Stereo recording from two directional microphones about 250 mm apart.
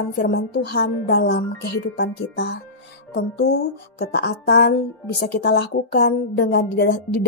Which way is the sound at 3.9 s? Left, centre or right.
Left.